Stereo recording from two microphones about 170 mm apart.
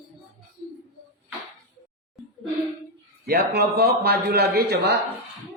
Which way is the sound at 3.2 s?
70° right (ahead or behind).